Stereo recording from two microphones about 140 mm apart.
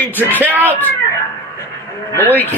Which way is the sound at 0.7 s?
15° left (ahead or behind).